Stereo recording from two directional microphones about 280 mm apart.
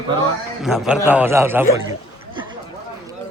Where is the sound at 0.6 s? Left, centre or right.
Centre.